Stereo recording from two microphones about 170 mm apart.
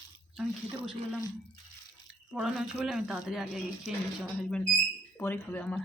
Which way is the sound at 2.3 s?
5° right (ahead or behind).